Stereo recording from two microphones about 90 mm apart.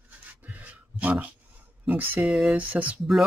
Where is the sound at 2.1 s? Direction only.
Centre (ahead or behind).